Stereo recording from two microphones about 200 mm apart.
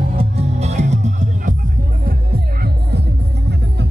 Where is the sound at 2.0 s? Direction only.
50° right (ahead or behind).